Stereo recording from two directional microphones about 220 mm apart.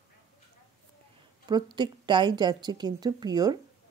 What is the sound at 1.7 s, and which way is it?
Speech, 20° right (ahead or behind).